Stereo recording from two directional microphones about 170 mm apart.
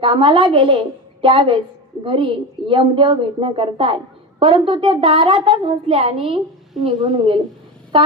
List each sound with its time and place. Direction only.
0.0 s a woman's voice: 30° right (ahead or behind)